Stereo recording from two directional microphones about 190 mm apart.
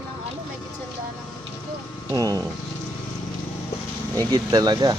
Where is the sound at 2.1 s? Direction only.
20° right (ahead or behind).